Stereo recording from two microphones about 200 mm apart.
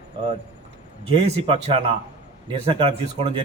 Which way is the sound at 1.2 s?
30° right (ahead or behind).